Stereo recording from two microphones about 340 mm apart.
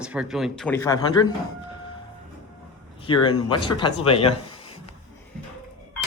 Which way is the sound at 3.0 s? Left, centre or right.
Centre.